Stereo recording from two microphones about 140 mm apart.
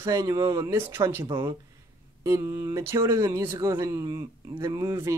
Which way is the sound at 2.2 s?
20° right (ahead or behind).